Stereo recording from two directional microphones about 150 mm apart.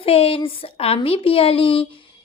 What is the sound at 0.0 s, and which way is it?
A woman's voice, 40° left (ahead or behind).